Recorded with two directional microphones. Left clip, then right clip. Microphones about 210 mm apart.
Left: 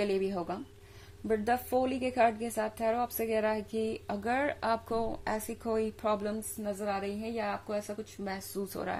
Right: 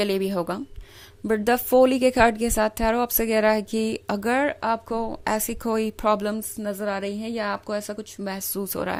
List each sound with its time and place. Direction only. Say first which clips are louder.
0.0 s a woman's voice: right 7 dB; 50° right (ahead or behind)